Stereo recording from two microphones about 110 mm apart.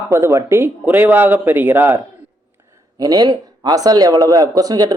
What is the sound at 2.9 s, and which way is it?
A man's voice, 35° right (ahead or behind).